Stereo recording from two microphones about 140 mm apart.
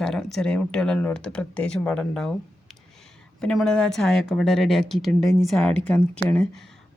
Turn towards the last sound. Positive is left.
turn(degrees=10)  # may be behind; listen again after turning